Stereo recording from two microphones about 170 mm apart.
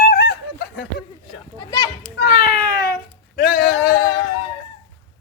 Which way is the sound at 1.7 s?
20° left (ahead or behind).